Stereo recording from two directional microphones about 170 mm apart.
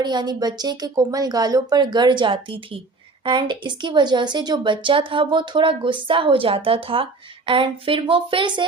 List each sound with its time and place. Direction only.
0.0 s a woman's voice: 25° right (ahead or behind)